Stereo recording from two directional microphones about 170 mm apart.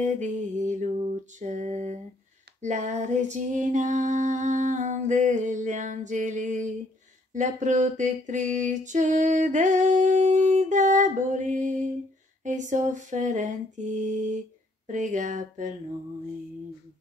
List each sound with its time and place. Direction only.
0.0 s female singing: 45° right (ahead or behind)